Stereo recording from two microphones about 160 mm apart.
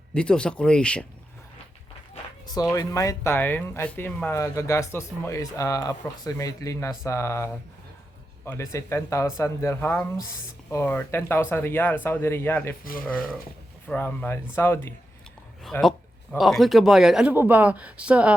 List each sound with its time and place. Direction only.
0.1 s speech: 5° left (ahead or behind)
2.5 s speech: 25° left (ahead or behind)
13.8 s speech: 10° left (ahead or behind)
15.6 s speech: centre (ahead or behind)